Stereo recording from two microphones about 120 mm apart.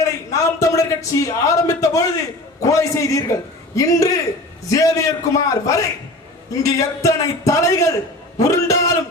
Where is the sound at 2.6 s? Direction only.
25° left (ahead or behind).